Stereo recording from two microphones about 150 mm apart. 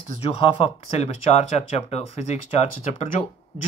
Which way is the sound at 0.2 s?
40° left (ahead or behind).